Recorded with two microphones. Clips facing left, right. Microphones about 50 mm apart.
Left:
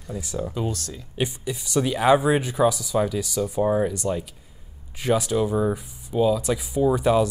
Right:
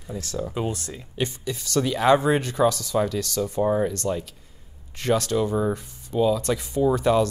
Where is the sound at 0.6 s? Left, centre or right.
Right.